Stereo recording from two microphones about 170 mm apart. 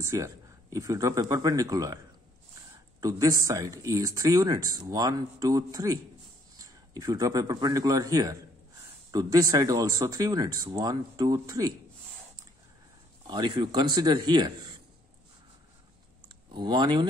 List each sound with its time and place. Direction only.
0.0 s speech: 20° right (ahead or behind)
3.0 s speech: 20° right (ahead or behind)
7.0 s speech: 20° right (ahead or behind)
13.3 s speech: 25° right (ahead or behind)
16.5 s speech: 25° right (ahead or behind)